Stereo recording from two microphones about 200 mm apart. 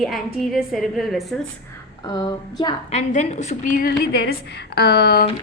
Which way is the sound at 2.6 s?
30° left (ahead or behind).